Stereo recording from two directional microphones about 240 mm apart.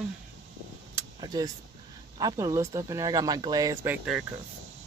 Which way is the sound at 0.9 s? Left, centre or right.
Centre.